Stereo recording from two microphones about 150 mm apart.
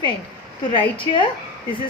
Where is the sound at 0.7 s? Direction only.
35° left (ahead or behind).